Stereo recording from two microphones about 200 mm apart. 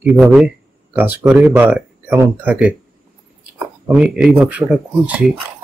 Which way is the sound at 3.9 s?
5° right (ahead or behind).